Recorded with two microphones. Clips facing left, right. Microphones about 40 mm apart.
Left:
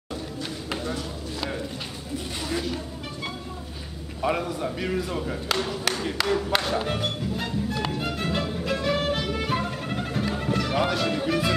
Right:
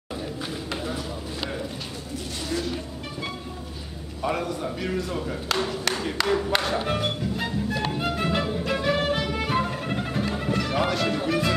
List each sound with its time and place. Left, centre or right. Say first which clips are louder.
0.8 s a sound: even; centre
4.4 s speech: even; centre
6.9 s music: right 2 dB; centre